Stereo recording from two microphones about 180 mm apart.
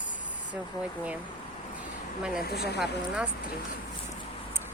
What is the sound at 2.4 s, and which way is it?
Speech, 60° left (ahead or behind).